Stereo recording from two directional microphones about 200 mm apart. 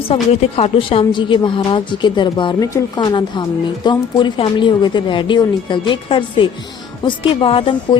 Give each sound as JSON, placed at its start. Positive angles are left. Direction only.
{"t": 0.1, "sound": "a woman's voice", "side_deg": 30}